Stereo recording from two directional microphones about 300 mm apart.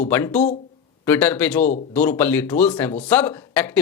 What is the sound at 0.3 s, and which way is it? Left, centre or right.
Speech, left.